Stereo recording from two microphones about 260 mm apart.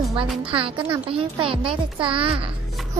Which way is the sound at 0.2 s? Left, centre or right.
Right.